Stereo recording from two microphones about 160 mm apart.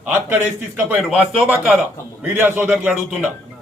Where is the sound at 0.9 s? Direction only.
10° right (ahead or behind).